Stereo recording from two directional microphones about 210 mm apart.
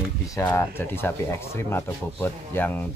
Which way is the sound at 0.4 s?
10° left (ahead or behind).